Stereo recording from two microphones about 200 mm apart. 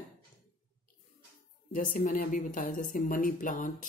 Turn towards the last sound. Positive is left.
turn(degrees=40)  # may be behind; listen again after turning